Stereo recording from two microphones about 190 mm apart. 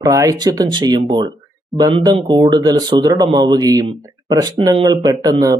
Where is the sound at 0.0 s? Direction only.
20° right (ahead or behind).